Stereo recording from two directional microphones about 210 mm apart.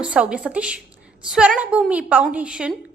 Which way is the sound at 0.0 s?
5° right (ahead or behind).